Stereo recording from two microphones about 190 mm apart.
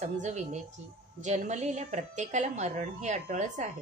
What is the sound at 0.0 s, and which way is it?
Speech, 40° right (ahead or behind).